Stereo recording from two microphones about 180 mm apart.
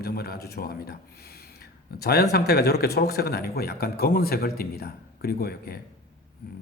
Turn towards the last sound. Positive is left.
turn(degrees=60)  # may be behind; listen again after turning